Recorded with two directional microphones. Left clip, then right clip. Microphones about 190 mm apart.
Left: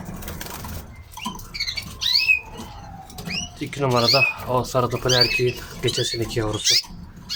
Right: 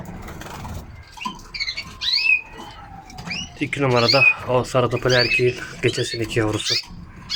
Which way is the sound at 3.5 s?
Centre (ahead or behind).